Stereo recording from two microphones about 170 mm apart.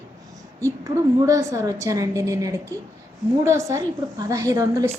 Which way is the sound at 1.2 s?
20° right (ahead or behind).